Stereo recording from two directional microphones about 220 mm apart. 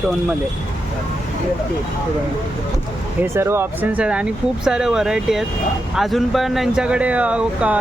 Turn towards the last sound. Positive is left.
turn(degrees=-5)  # may be behind; listen again after turning